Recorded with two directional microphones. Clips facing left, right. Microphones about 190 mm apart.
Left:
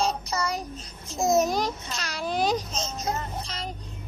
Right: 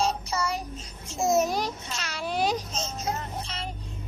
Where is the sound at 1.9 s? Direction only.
35° left (ahead or behind).